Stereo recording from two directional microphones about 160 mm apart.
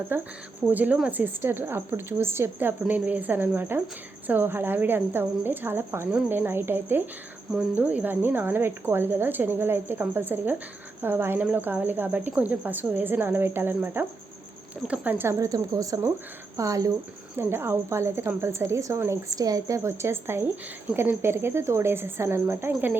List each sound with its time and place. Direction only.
0.1 s a woman's voice: 10° right (ahead or behind)